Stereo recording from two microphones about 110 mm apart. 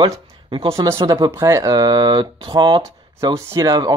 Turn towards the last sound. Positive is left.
turn(degrees=-35)  # may be behind; listen again after turning